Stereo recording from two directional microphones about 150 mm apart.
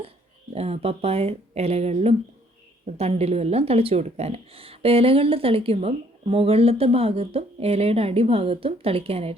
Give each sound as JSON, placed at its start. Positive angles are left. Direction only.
{"t": 0.5, "sound": "speech", "side_deg": -45}